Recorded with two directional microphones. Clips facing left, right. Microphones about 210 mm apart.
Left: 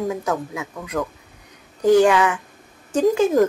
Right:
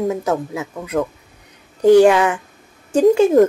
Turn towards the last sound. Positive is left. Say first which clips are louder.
# right 5 dB
turn(degrees=-30)  # may be behind; listen again after turning